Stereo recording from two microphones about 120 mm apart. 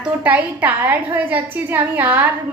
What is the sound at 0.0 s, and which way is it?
A woman's voice, 10° right (ahead or behind).